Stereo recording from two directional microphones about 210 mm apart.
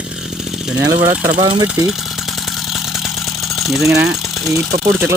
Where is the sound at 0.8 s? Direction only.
10° right (ahead or behind).